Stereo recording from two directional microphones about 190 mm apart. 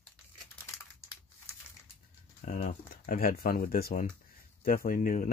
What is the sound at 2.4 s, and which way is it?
Speech, 40° left (ahead or behind).